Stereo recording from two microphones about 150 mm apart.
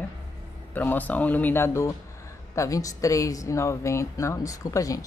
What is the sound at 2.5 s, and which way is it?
Speech, 20° left (ahead or behind).